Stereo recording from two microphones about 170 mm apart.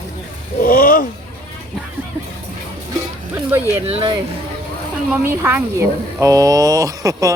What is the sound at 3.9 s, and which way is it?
Speech, 35° right (ahead or behind).